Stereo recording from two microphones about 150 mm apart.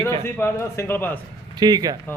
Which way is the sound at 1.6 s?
25° right (ahead or behind).